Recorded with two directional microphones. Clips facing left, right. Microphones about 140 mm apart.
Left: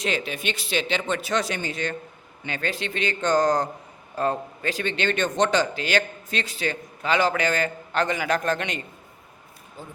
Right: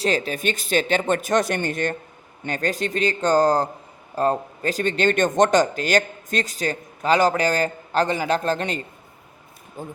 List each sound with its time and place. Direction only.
0.0 s speech: 40° right (ahead or behind)
9.8 s speech: 50° right (ahead or behind)